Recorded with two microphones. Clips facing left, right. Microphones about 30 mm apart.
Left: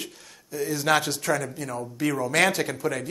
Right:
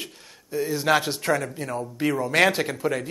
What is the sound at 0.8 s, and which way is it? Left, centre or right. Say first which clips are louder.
Speech: right 1 dB; centre.